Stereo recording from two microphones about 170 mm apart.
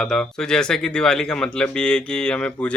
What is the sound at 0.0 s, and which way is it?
Speech, 5° left (ahead or behind).